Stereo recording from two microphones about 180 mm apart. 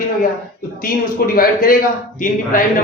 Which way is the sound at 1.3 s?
50° left (ahead or behind).